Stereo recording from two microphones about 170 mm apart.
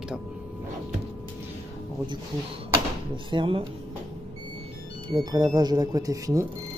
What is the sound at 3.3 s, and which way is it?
Speech, 30° right (ahead or behind).